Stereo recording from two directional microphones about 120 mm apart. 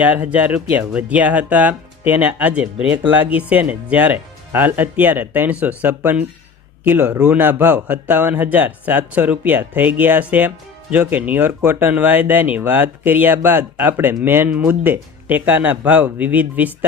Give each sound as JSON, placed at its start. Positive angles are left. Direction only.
{"t": 0.0, "sound": "speech", "side_deg": -10}